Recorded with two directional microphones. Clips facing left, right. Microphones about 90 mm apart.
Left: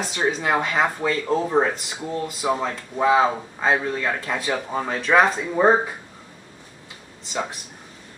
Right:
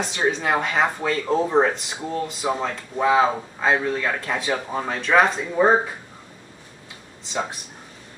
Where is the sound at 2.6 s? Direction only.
5° left (ahead or behind).